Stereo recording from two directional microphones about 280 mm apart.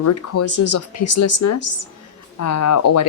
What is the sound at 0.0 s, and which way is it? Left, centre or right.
Speech, left.